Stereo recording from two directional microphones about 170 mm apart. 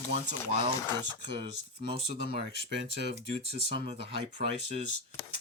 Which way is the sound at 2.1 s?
75° left (ahead or behind).